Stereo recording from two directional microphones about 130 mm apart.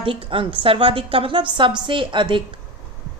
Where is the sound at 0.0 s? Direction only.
45° right (ahead or behind).